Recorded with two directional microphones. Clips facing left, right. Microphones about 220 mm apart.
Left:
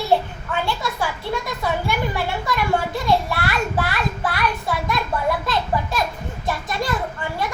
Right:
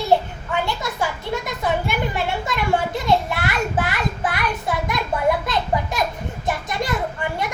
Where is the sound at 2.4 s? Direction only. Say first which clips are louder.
Left 1 dB; 20° right (ahead or behind).